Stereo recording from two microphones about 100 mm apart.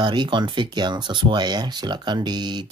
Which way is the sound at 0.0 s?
50° right (ahead or behind).